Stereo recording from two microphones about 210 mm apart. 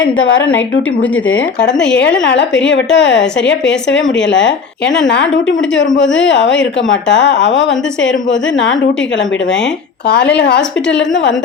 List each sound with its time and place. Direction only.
0.0 s a woman's voice: 65° left (ahead or behind)
10.3 s a woman's voice: 55° left (ahead or behind)